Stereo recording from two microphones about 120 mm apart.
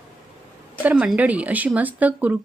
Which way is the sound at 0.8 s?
15° right (ahead or behind).